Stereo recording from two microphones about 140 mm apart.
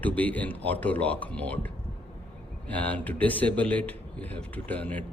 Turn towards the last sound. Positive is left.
turn(degrees=10)  # may be behind; listen again after turning